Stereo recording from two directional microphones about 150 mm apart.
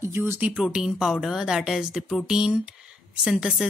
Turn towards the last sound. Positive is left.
turn(degrees=-5)  # may be behind; listen again after turning